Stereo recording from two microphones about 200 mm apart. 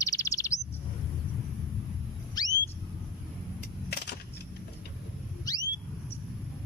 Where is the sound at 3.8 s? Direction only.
55° left (ahead or behind).